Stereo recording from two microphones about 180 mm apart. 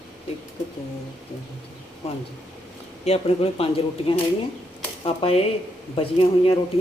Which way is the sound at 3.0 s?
35° left (ahead or behind).